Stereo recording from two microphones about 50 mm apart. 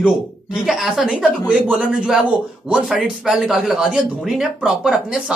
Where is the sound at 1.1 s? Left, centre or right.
Centre.